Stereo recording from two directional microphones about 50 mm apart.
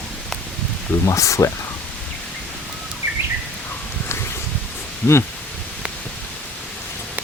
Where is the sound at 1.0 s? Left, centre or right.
Left.